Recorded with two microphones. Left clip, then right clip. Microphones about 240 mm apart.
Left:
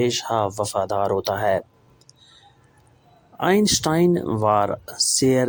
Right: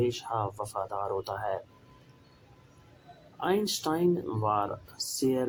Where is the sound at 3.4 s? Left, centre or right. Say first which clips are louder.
Left 10 dB; left.